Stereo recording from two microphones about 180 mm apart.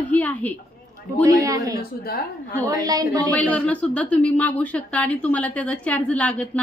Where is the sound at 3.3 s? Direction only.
5° left (ahead or behind).